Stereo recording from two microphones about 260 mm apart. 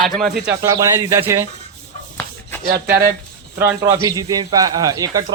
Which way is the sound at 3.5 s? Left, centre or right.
Centre.